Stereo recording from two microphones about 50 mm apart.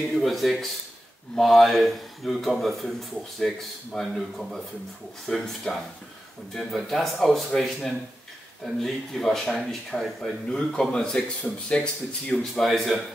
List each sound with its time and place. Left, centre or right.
0.1 s speech: centre; by 12.4 s left
12.5 s speech: centre